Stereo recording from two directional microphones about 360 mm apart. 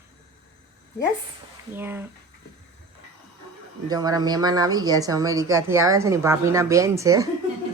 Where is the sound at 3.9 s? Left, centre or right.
Centre.